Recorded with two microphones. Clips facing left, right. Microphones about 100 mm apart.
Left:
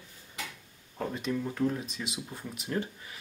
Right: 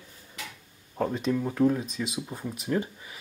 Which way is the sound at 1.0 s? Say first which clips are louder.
Right 5 dB; 20° right (ahead or behind).